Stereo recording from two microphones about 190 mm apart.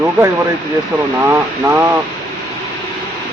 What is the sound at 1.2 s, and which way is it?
Speech, 15° right (ahead or behind).